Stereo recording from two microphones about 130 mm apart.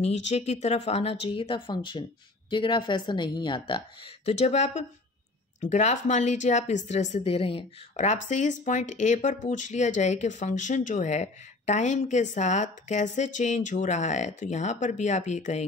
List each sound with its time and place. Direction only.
0.0 s speech: 55° left (ahead or behind); by 3.8 s 40° left (ahead or behind)
4.3 s speech: 55° left (ahead or behind)
7.9 s speech: 65° left (ahead or behind)